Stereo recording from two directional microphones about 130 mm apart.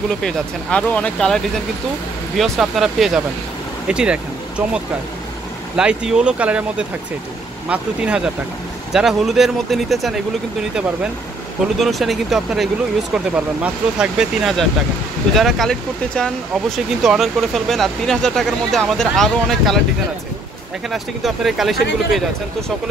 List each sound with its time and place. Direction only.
0.2 s speech: 10° left (ahead or behind)
11.8 s speech: centre (ahead or behind)
20.9 s speech: centre (ahead or behind)